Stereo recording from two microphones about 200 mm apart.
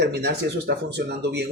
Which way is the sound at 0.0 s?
55° right (ahead or behind).